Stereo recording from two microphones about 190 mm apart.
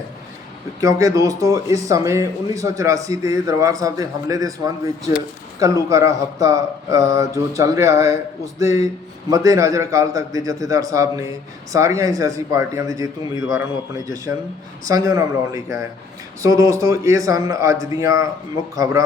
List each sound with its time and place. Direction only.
0.8 s a man's voice: 15° right (ahead or behind)